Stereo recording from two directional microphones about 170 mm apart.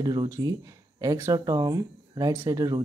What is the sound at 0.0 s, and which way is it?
Speech, 25° right (ahead or behind).